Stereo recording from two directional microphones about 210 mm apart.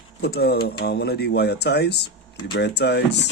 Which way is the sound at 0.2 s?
50° left (ahead or behind).